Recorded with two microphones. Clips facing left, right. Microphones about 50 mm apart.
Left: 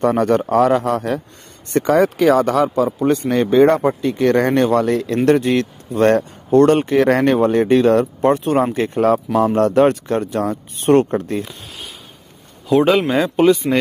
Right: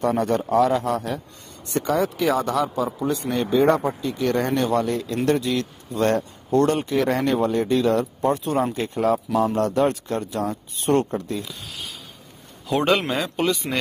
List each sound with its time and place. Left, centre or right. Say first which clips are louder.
0.0 s a man's voice: left 6 dB; left
8.7 s speech: left 6 dB; left
12.6 s speech: left 6 dB; centre